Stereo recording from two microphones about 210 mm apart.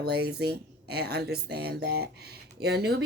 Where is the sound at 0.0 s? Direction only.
50° right (ahead or behind).